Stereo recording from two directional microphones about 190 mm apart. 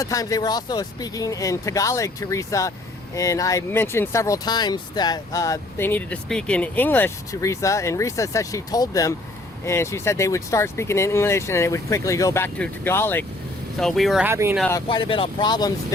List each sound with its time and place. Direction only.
0.0 s speech: 20° left (ahead or behind)
13.7 s speech: centre (ahead or behind)
14.3 s speech: 10° right (ahead or behind)
14.7 s speech: 20° left (ahead or behind)